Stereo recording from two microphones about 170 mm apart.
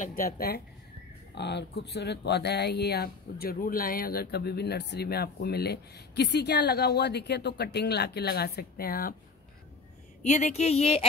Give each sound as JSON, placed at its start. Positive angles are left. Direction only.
{"t": 0.0, "sound": "speech", "side_deg": 60}
{"t": 1.3, "sound": "speech", "side_deg": 90}
{"t": 10.2, "sound": "speech", "side_deg": 45}